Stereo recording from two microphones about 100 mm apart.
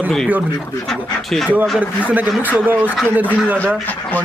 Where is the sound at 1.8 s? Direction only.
15° right (ahead or behind).